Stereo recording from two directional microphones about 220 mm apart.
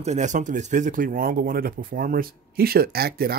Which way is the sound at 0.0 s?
30° right (ahead or behind).